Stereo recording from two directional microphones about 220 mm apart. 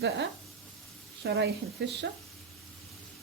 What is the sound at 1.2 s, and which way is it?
Speech, 50° right (ahead or behind).